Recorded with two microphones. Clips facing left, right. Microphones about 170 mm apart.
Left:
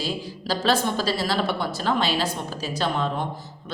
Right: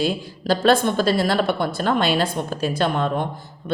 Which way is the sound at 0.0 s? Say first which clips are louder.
Right 6 dB; 55° right (ahead or behind).